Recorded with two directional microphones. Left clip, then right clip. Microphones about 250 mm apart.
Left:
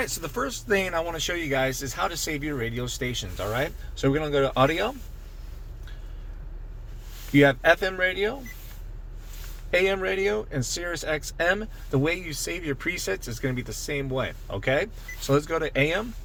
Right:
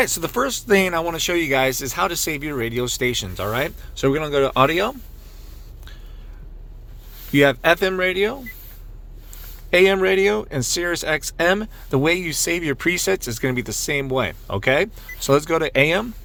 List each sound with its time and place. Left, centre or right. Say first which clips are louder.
0.0 s speech: right 9 dB; right
7.3 s speech: right 3 dB; right
9.6 s speech: right 8 dB; right